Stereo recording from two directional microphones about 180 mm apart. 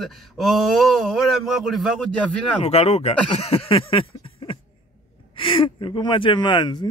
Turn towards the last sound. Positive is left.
turn(degrees=25)  # may be behind; listen again after turning